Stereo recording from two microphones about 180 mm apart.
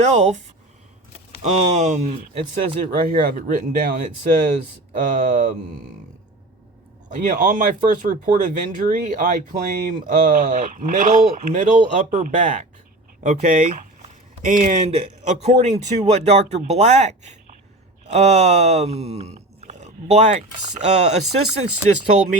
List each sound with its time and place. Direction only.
0.0 s speech: 40° right (ahead or behind)
7.1 s speech: 45° right (ahead or behind)